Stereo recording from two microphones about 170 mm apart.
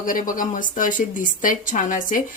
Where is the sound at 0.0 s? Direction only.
50° left (ahead or behind).